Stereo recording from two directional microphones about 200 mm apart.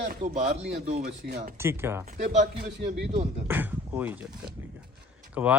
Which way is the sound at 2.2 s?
35° right (ahead or behind).